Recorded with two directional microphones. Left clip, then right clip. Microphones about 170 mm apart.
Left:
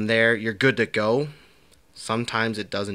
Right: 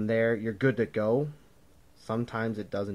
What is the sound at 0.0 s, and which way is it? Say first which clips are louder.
Speech: left 7 dB; 20° left (ahead or behind).